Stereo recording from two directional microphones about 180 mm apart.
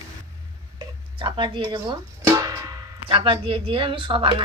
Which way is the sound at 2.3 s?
20° right (ahead or behind).